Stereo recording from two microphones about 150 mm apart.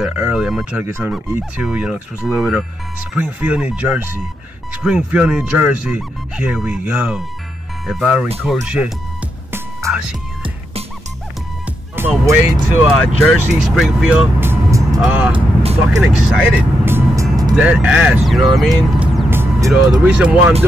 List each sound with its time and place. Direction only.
0.0 s speech: 10° right (ahead or behind)
9.8 s music: 20° right (ahead or behind)
12.3 s speech: 15° right (ahead or behind)
13.0 s speech: 5° left (ahead or behind); by 15.0 s 20° right (ahead or behind)
15.0 s speech: 10° right (ahead or behind)
15.3 s speech: 40° right (ahead or behind)
16.0 s speech: 5° right (ahead or behind)
16.8 s vehicle: 20° right (ahead or behind)
17.6 s speech: 10° right (ahead or behind)